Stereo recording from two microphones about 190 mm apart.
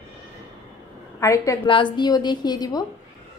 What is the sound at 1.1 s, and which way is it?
A woman's voice, 15° left (ahead or behind).